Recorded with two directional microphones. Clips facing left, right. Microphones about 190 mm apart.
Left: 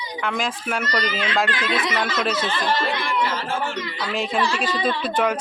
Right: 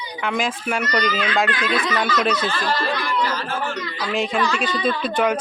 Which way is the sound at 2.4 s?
20° left (ahead or behind).